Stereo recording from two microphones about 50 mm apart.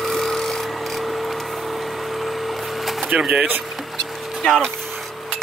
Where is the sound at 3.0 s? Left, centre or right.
Right.